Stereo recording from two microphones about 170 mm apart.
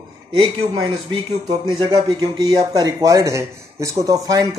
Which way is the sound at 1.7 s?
25° right (ahead or behind).